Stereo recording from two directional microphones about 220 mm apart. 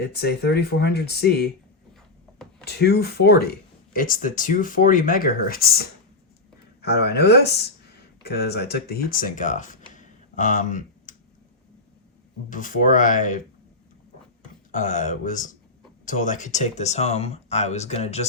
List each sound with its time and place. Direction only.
0.0 s speech: 50° left (ahead or behind)
2.6 s speech: 50° left (ahead or behind)
12.5 s speech: 35° left (ahead or behind)
14.7 s speech: 35° left (ahead or behind)